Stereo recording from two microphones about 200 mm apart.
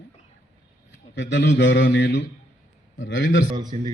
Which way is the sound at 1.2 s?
60° left (ahead or behind).